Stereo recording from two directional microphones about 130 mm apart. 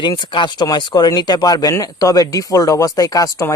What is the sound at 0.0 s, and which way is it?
Speech, 35° left (ahead or behind).